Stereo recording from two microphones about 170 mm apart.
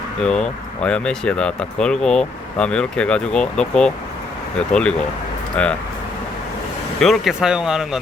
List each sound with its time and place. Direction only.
0.2 s speech: 5° left (ahead or behind)
7.0 s speech: centre (ahead or behind)